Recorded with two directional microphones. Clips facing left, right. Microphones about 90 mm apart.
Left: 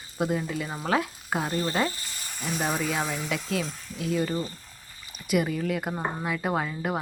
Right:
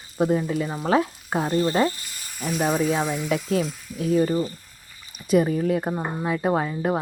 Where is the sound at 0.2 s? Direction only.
25° right (ahead or behind).